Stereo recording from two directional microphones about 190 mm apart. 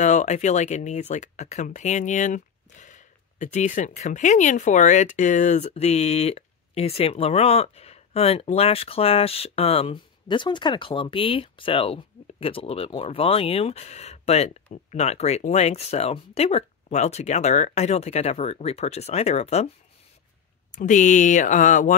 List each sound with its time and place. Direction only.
0.0 s speech: 40° left (ahead or behind)
20.7 s speech: 40° left (ahead or behind)